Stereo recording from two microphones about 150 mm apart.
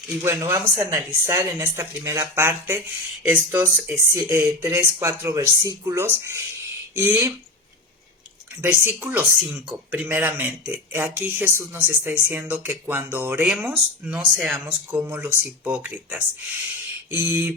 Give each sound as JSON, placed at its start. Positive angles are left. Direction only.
{"t": 0.2, "sound": "speech", "side_deg": -20}
{"t": 8.6, "sound": "speech", "side_deg": -15}